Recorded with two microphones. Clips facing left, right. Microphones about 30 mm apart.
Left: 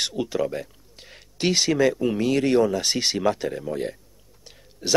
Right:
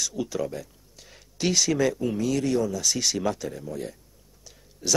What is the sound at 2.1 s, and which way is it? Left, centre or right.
Speech, left.